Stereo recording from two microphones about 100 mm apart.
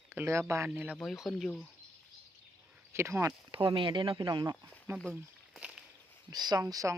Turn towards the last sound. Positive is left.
turn(degrees=-35)  # may be behind; listen again after turning